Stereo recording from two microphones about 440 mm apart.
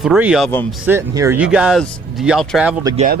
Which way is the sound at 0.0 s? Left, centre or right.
Centre.